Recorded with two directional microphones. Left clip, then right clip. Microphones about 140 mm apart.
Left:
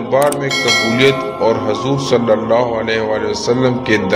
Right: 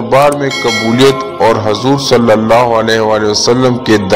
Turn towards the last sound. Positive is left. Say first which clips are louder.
# right 4 dB
turn(degrees=-50)  # may be behind; listen again after turning